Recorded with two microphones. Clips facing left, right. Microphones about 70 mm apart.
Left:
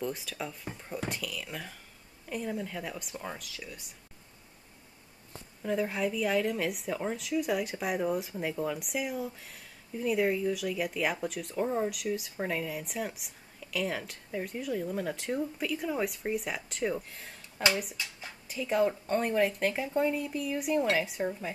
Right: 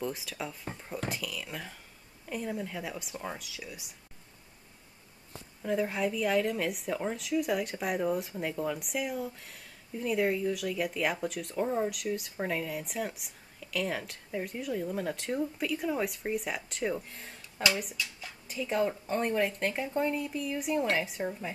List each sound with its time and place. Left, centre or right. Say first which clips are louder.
0.0 s a woman's voice: even; centre
5.6 s a woman's voice: even; centre
18.0 s speech: right 2 dB; left
18.5 s a woman's voice: left 2 dB; centre